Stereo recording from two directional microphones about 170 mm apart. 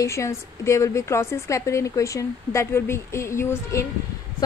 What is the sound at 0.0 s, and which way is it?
A woman's voice, 15° left (ahead or behind).